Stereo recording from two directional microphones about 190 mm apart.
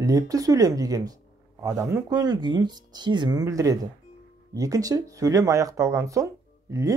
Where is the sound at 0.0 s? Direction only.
20° right (ahead or behind).